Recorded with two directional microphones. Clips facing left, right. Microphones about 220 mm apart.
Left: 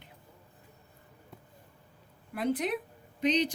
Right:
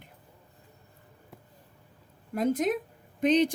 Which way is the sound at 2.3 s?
45° right (ahead or behind).